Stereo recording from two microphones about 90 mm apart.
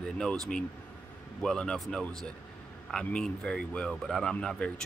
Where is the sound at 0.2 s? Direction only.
10° left (ahead or behind).